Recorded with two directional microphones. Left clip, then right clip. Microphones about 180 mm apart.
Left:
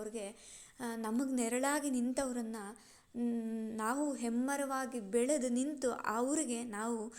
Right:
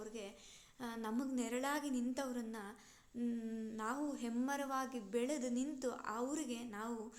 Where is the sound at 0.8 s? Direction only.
30° left (ahead or behind).